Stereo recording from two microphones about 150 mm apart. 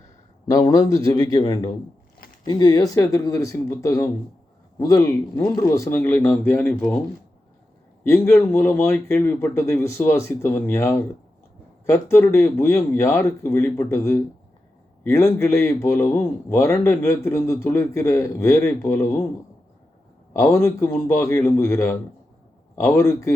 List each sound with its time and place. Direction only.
0.4 s a man's voice: 25° left (ahead or behind)
8.0 s a man's voice: 15° left (ahead or behind)
20.3 s a man's voice: 20° left (ahead or behind)